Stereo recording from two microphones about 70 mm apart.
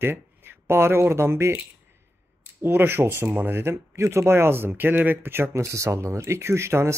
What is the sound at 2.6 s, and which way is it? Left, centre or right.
Speech, right.